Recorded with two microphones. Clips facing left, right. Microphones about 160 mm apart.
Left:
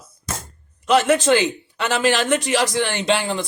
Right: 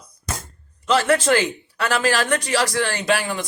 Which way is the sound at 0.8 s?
20° left (ahead or behind).